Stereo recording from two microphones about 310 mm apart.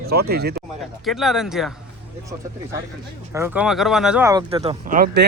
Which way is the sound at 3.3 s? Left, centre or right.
Centre.